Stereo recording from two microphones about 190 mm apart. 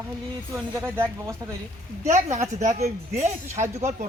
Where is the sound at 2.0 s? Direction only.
35° right (ahead or behind).